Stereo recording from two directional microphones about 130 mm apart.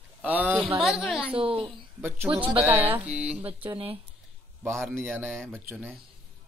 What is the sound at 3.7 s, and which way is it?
Speech, 45° right (ahead or behind).